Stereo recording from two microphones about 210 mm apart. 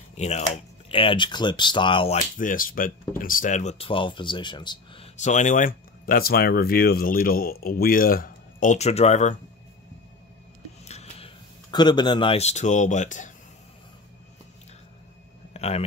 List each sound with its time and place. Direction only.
0.4 s speech: 25° left (ahead or behind)
2.1 s speech: 40° left (ahead or behind)
10.9 s speech: 30° left (ahead or behind)
15.5 s a sound: 30° left (ahead or behind)